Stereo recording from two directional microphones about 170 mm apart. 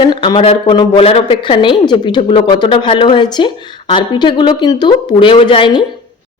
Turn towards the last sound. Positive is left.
turn(degrees=30)  # may be behind; listen again after turning